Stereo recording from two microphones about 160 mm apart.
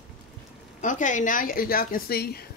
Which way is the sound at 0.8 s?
55° left (ahead or behind).